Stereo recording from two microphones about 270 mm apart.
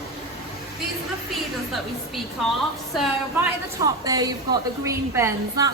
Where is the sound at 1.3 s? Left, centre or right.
Centre.